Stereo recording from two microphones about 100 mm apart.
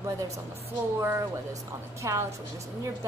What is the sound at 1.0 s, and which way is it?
A woman's voice, 30° right (ahead or behind).